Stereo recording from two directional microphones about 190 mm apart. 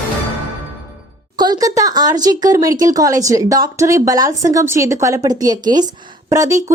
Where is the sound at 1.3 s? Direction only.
20° right (ahead or behind).